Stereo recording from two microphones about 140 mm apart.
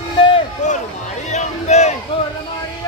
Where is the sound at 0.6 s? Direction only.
60° left (ahead or behind).